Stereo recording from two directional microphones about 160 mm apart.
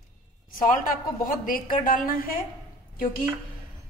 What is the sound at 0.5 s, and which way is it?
A woman's voice, 60° left (ahead or behind).